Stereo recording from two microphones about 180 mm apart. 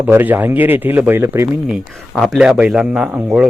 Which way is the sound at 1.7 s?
Centre (ahead or behind).